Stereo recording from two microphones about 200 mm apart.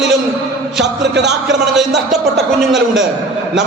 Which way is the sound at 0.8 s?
60° right (ahead or behind).